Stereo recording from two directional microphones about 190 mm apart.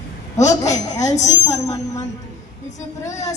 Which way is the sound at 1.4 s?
15° left (ahead or behind).